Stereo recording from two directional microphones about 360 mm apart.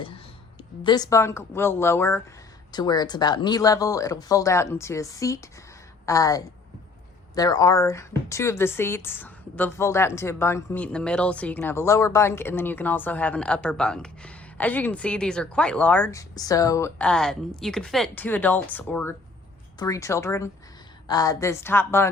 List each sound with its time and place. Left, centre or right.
0.9 s speech: centre